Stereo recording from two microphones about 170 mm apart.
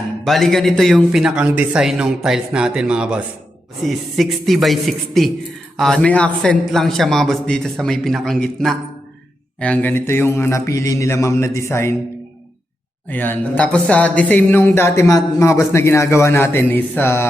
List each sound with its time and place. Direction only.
0.3 s a man's voice: centre (ahead or behind)
13.1 s speech: 10° left (ahead or behind)